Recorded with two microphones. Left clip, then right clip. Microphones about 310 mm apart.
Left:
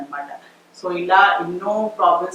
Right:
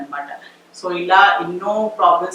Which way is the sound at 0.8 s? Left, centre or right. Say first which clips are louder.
Right 2 dB; centre.